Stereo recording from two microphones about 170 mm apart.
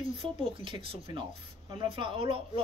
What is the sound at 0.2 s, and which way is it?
Speech, 30° right (ahead or behind).